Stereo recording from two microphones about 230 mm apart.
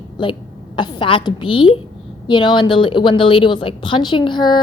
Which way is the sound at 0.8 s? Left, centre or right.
Left.